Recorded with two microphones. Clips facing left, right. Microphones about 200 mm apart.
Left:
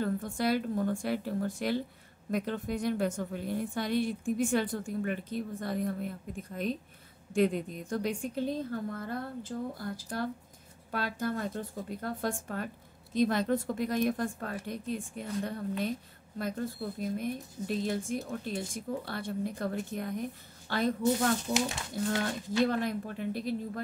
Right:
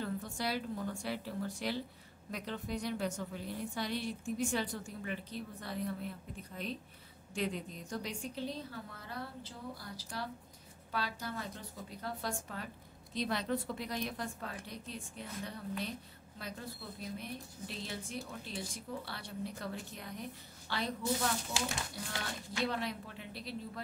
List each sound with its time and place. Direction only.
0.0 s a woman's voice: 50° left (ahead or behind)
21.5 s a child's voice: 35° left (ahead or behind)
22.7 s a woman's voice: 50° left (ahead or behind)